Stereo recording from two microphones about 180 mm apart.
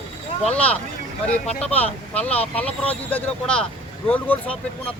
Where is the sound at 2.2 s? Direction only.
35° left (ahead or behind).